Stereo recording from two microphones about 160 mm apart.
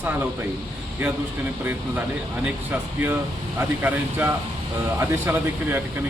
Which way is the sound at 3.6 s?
10° right (ahead or behind).